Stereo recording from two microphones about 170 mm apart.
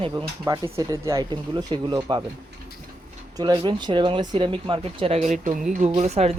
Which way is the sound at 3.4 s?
25° right (ahead or behind).